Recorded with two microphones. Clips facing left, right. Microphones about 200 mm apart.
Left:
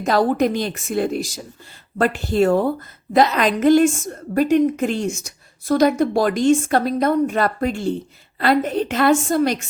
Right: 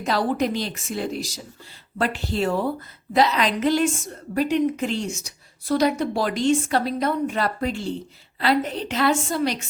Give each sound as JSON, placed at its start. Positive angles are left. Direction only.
{"t": 0.0, "sound": "a woman's voice", "side_deg": 45}